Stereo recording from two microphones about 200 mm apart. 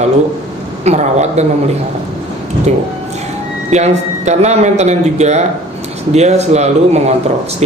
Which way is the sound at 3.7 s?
35° right (ahead or behind).